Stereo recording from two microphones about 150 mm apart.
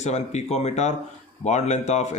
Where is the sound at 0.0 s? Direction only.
45° left (ahead or behind).